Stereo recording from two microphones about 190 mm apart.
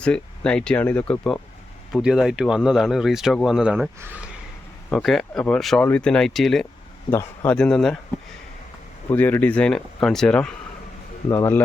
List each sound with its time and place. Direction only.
0.0 s speech: 5° left (ahead or behind)
9.0 s speech: 10° left (ahead or behind)
11.3 s speech: 15° left (ahead or behind)